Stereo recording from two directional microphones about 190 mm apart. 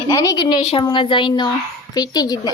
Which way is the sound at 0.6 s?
30° left (ahead or behind).